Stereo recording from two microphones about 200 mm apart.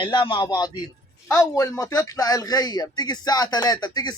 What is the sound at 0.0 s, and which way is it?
Speech, 25° left (ahead or behind).